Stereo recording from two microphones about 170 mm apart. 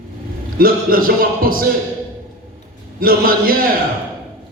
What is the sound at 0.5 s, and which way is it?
Music, 60° right (ahead or behind).